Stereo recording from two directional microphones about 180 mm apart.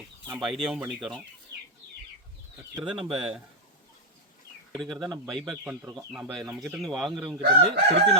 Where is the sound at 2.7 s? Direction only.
5° right (ahead or behind).